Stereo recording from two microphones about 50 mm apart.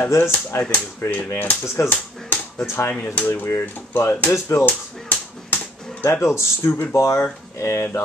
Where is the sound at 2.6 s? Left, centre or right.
Left.